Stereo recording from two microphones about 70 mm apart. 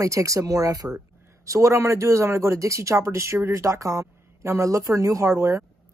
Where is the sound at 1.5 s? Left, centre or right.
Right.